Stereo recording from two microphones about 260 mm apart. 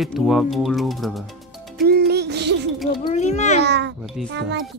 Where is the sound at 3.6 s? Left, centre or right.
Right.